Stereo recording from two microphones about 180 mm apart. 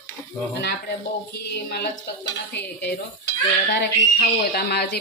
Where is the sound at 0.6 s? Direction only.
65° left (ahead or behind).